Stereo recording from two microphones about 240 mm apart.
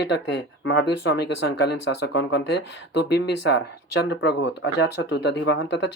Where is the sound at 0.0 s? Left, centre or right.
Left.